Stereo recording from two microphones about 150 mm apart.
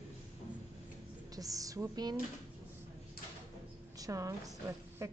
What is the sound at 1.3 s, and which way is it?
Speech, 25° right (ahead or behind).